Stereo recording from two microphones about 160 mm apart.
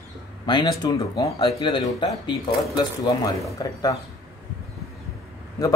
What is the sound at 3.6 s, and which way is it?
Speech, 25° left (ahead or behind).